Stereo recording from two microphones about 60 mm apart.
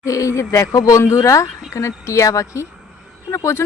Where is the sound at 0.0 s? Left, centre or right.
Left.